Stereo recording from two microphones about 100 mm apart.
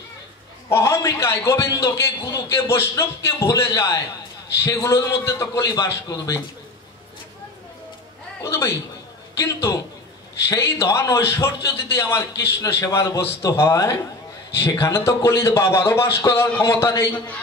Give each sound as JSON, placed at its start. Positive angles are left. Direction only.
{"t": 0.7, "sound": "a man's voice", "side_deg": 30}
{"t": 8.4, "sound": "a sound", "side_deg": 30}
{"t": 9.4, "sound": "a man's voice", "side_deg": 35}